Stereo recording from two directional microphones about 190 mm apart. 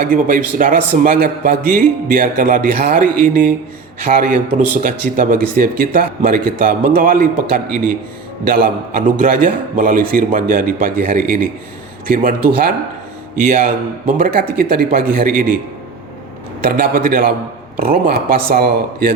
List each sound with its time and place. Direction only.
0.0 s speech: 45° right (ahead or behind)
16.6 s speech: 50° right (ahead or behind)